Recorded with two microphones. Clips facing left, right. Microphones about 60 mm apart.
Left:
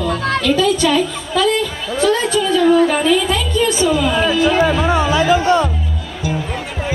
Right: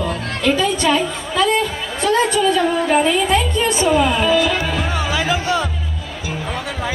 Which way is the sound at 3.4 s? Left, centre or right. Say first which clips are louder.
Left 1 dB; right.